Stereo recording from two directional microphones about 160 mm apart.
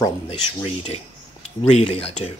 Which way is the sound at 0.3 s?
35° left (ahead or behind).